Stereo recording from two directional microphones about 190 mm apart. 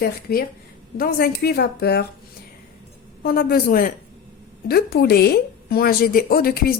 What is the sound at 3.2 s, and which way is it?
Speech, 50° left (ahead or behind).